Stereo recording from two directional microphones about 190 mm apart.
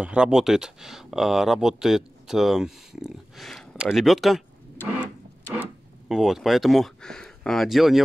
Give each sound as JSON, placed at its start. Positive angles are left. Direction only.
{"t": 0.0, "sound": "speech", "side_deg": -5}
{"t": 5.6, "sound": "speech", "side_deg": 0}